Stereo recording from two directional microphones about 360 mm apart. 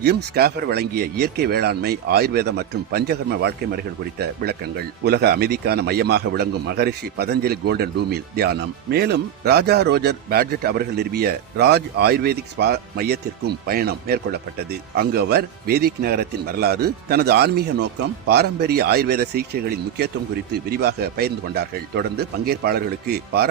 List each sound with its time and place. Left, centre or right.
0.0 s a man's voice: right
5.0 s a man's voice: right